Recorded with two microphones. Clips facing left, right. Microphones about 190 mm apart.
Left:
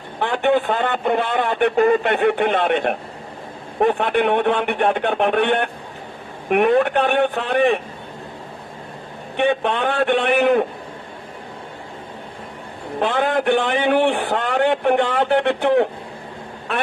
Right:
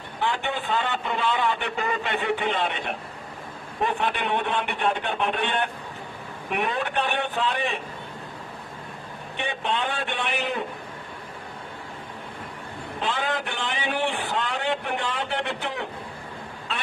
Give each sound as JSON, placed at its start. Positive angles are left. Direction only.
{"t": 0.2, "sound": "a man's voice", "side_deg": 60}
{"t": 9.4, "sound": "a man's voice", "side_deg": 60}
{"t": 13.0, "sound": "a man's voice", "side_deg": 55}